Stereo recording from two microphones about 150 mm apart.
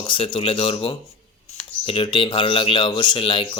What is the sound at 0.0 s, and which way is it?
Speech, 35° left (ahead or behind).